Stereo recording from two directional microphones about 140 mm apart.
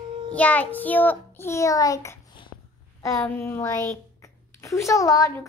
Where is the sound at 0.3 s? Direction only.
10° left (ahead or behind).